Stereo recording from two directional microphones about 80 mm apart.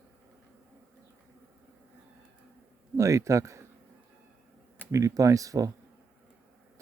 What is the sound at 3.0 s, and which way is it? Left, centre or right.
Speech, right.